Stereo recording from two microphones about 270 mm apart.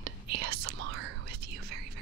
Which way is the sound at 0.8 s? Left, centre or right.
Right.